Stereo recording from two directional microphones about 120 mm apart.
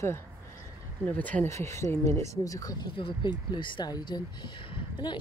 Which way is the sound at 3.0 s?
45° left (ahead or behind).